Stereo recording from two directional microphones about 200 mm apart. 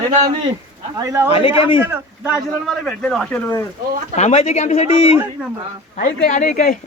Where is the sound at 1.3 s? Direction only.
30° left (ahead or behind).